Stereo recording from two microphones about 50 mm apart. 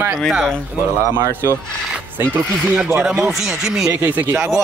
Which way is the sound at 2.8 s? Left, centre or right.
Centre.